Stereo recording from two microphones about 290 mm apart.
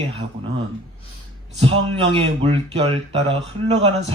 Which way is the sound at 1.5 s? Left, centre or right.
Centre.